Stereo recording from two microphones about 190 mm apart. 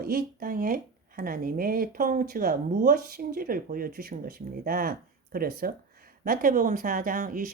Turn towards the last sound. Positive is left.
turn(degrees=-45)  # may be behind; listen again after turning